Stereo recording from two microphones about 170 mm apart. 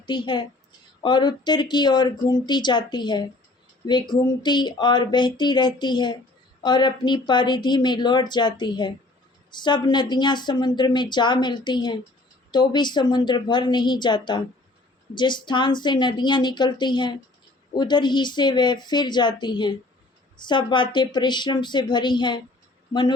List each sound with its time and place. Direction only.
0.0 s a woman's voice: 25° left (ahead or behind)